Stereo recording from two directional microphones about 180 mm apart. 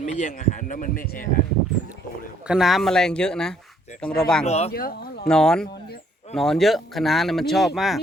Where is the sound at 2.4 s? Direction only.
5° right (ahead or behind).